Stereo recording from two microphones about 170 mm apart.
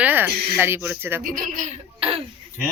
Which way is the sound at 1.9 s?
35° right (ahead or behind).